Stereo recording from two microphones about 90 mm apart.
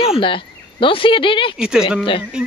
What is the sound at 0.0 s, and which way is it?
Speech, 80° left.